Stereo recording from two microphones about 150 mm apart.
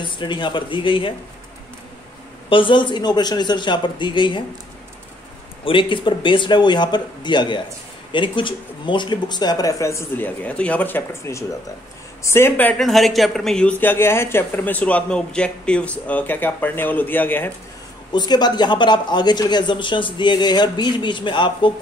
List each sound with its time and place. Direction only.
0.0 s speech: 30° left (ahead or behind)
2.5 s speech: 35° left (ahead or behind)
5.7 s a man's voice: 35° left (ahead or behind); by 17.5 s 15° left (ahead or behind)
18.1 s speech: 30° left (ahead or behind)